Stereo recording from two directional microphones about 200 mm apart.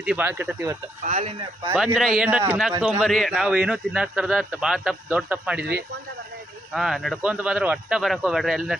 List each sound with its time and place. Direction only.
0.0 s speech: 5° right (ahead or behind)
1.0 s speech: 35° right (ahead or behind)
1.7 s a man's voice: 5° right (ahead or behind)
6.7 s a man's voice: centre (ahead or behind)